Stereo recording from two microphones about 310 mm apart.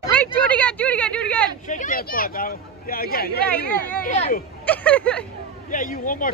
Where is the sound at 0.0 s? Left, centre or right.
Centre.